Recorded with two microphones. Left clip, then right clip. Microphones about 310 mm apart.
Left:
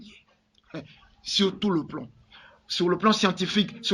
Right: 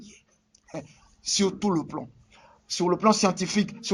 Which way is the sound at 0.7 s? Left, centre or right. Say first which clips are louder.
Right 2 dB; right.